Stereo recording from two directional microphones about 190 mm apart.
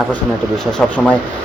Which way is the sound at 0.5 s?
5° left (ahead or behind).